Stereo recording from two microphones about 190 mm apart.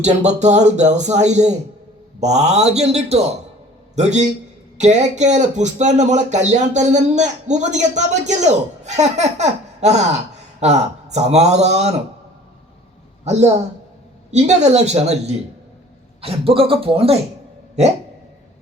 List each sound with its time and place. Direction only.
0.0 s speech: 35° right (ahead or behind)
13.2 s speech: 35° right (ahead or behind)